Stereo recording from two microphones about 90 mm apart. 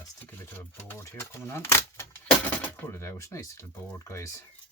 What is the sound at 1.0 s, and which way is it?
Speech, 30° left (ahead or behind).